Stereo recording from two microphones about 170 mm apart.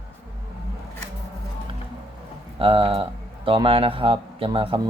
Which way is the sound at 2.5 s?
35° right (ahead or behind).